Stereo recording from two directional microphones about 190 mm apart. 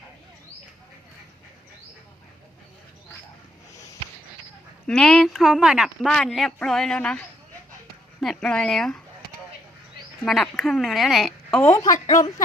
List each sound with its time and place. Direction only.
4.9 s a woman's voice: 5° left (ahead or behind)
10.2 s a woman's voice: centre (ahead or behind)
11.7 s a woman's voice: 20° left (ahead or behind)